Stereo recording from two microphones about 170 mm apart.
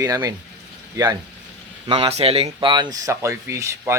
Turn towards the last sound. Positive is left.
turn(degrees=-15)  # may be behind; listen again after turning